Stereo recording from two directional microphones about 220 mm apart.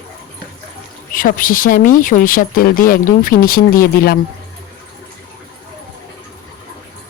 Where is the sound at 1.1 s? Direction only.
40° left (ahead or behind).